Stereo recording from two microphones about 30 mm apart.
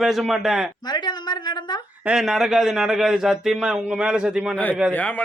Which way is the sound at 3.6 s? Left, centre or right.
Right.